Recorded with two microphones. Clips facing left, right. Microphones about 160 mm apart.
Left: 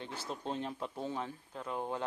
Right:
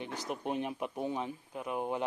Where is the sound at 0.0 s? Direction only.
15° right (ahead or behind).